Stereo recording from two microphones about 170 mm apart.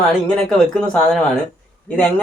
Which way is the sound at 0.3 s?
5° left (ahead or behind).